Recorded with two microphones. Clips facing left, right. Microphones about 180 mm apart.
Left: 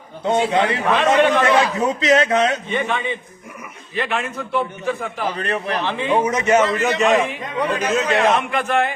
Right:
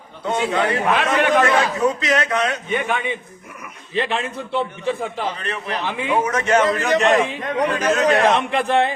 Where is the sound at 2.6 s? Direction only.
10° right (ahead or behind).